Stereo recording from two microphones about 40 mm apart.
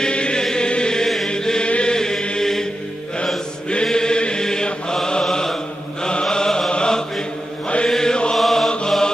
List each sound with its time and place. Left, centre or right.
0.0 s chant: left
1.0 s chant: centre
1.3 s chant: centre
2.0 s chant: centre
3.8 s chant: centre
7.9 s mantra: centre
8.4 s mantra: centre
8.6 s chant: centre